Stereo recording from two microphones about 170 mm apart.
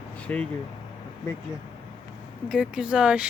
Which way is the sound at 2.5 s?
5° right (ahead or behind).